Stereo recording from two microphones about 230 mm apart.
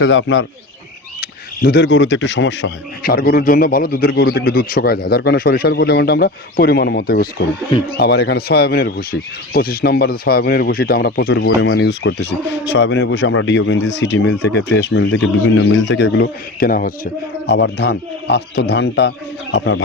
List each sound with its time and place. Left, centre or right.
0.0 s speech: left
1.2 s speech: left